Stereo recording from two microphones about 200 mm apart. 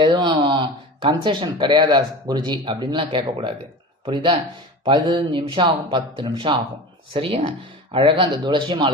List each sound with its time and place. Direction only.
0.0 s speech: 20° right (ahead or behind)